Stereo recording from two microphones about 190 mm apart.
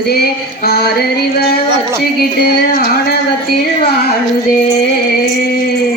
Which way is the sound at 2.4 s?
55° left (ahead or behind).